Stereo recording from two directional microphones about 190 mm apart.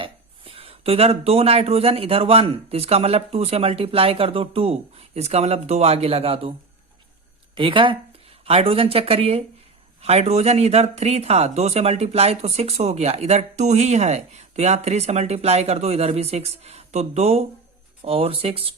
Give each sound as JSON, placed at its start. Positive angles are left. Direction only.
{"t": 0.0, "sound": "speech", "side_deg": -30}
{"t": 7.5, "sound": "speech", "side_deg": -25}